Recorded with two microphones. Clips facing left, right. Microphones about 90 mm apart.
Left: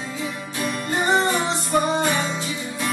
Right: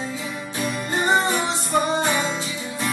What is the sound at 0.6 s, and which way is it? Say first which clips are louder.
Music: even; centre (ahead or behind).